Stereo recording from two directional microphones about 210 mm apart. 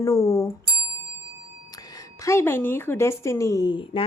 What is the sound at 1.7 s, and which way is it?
A woman's voice, 15° left (ahead or behind).